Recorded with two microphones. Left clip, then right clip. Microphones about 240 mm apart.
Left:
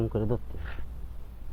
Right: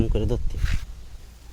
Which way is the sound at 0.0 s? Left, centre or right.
Right.